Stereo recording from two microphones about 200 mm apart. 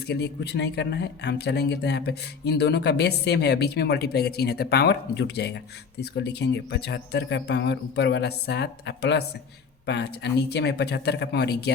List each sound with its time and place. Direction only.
0.1 s speech: 55° left (ahead or behind)